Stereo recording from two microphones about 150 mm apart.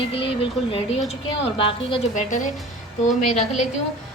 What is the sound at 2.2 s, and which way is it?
Speech, 55° left (ahead or behind).